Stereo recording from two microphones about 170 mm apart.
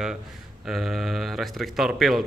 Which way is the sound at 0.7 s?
Centre (ahead or behind).